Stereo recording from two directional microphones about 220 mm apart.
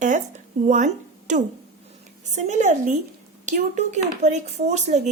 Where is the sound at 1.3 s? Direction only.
35° right (ahead or behind).